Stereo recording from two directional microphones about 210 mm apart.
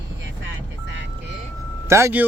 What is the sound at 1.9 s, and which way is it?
Speech, 10° right (ahead or behind).